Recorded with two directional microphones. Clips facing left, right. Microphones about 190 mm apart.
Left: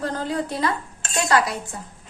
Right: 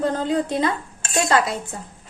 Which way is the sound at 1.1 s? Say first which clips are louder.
Right 1 dB; 25° right (ahead or behind).